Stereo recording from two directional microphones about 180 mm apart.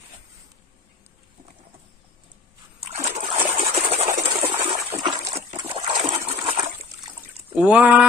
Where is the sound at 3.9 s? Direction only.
35° right (ahead or behind).